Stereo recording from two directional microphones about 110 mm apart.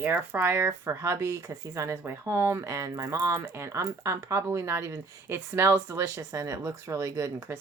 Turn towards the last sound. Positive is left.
turn(degrees=-30)  # may be behind; listen again after turning